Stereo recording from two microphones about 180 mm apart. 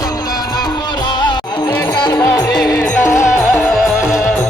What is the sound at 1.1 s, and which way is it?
Music, 25° left (ahead or behind).